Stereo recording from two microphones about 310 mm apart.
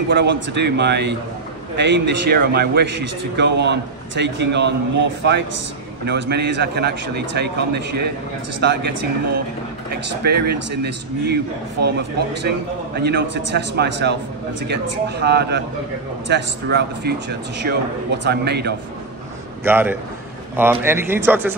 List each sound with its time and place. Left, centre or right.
0.1 s a man's voice: right
10.2 s a man's voice: right
13.0 s a man's voice: right
19.6 s speech: centre